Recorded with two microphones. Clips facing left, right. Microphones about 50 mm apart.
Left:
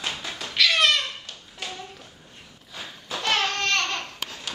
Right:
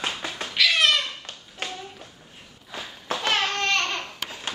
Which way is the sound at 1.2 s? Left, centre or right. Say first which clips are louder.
Right 2 dB; right.